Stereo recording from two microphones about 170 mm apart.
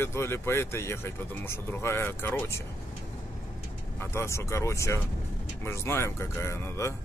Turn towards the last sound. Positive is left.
turn(degrees=15)  # may be behind; listen again after turning